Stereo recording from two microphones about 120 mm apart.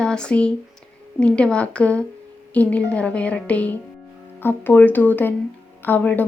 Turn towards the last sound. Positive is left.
turn(degrees=15)  # may be behind; listen again after turning